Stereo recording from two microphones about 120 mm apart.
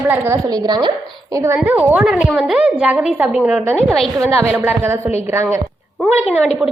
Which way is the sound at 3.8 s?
Centre (ahead or behind).